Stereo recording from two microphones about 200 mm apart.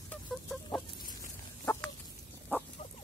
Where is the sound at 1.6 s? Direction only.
10° left (ahead or behind).